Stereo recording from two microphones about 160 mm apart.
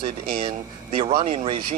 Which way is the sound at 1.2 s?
35° right (ahead or behind).